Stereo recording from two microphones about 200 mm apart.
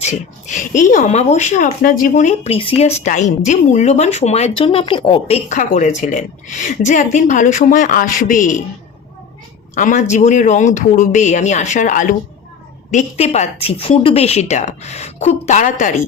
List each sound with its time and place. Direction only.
0.0 s speech: 35° left (ahead or behind)
9.7 s speech: 40° left (ahead or behind)